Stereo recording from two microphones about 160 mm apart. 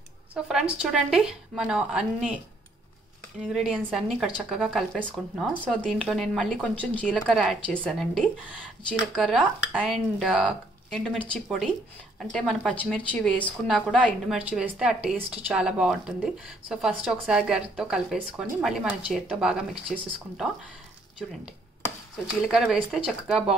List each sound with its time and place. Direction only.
0.3 s a woman's voice: 5° right (ahead or behind)
3.6 s a woman's voice: 5° right (ahead or behind)
22.4 s a woman's voice: 5° right (ahead or behind)